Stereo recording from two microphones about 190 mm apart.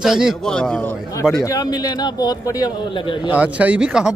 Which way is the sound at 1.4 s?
20° left (ahead or behind).